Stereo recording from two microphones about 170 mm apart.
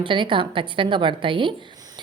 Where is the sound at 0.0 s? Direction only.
30° right (ahead or behind).